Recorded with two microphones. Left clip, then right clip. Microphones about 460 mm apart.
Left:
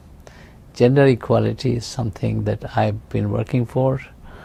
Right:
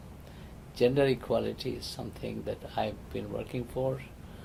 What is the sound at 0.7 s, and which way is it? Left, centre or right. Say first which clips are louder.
Speech: left 11 dB; left.